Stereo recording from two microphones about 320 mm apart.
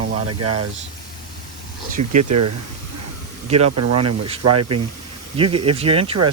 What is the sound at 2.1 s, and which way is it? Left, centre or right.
Speech, right.